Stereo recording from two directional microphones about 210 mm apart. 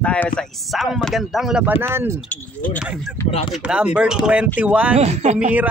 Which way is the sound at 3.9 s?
5° right (ahead or behind).